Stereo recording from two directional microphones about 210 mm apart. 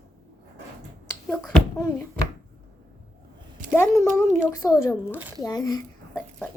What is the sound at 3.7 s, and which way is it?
A child's voice, 10° left (ahead or behind).